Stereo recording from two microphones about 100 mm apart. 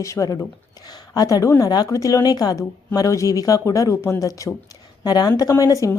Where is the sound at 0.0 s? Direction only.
30° left (ahead or behind).